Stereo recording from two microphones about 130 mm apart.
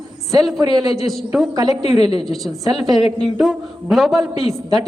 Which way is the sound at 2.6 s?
30° right (ahead or behind).